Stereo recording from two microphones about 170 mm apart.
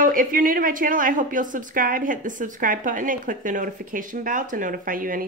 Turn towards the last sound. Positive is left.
turn(degrees=-55)  # may be behind; listen again after turning